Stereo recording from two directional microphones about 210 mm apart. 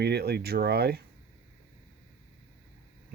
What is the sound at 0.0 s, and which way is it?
Speech, 50° right (ahead or behind).